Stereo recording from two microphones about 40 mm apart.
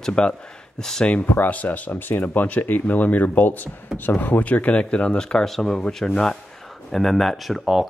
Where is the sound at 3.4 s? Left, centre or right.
Left.